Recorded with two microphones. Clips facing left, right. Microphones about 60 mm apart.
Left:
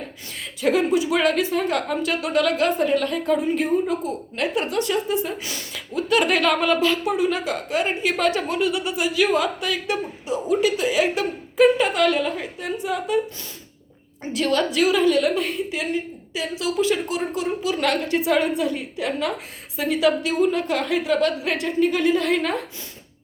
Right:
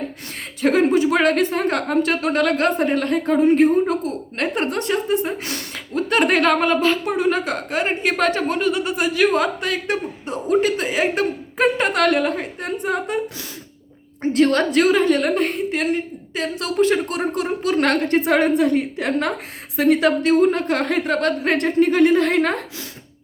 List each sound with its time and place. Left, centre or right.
0.6 s speech: right
14.2 s speech: right